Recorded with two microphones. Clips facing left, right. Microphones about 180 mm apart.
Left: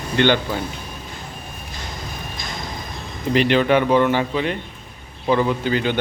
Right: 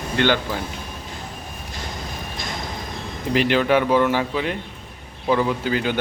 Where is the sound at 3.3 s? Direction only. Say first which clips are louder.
Left 2 dB; 5° right (ahead or behind).